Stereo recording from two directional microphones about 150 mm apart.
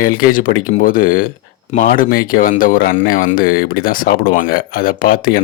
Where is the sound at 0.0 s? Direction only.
70° left (ahead or behind).